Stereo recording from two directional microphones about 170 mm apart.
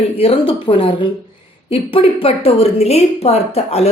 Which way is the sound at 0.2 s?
35° left (ahead or behind).